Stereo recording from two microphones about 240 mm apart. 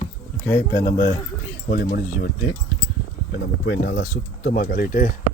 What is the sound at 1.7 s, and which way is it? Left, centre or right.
Speech, left.